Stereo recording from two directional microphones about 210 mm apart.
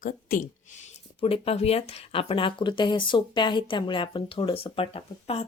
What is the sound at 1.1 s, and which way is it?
Speech, 25° left (ahead or behind).